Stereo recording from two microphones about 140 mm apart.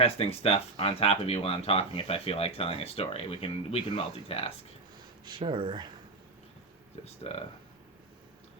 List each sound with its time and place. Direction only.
0.0 s speech: 45° left (ahead or behind)
5.2 s speech: 35° right (ahead or behind)
7.0 s speech: 45° left (ahead or behind)